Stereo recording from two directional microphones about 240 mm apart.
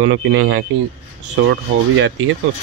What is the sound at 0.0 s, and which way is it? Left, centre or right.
Speech, right.